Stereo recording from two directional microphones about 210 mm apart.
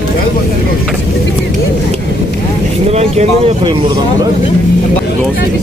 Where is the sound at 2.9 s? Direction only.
30° right (ahead or behind).